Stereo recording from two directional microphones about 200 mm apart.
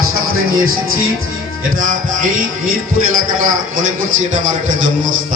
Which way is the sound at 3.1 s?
40° right (ahead or behind).